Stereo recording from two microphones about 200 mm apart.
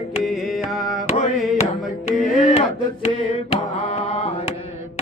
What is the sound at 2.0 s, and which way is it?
Music, 35° left (ahead or behind).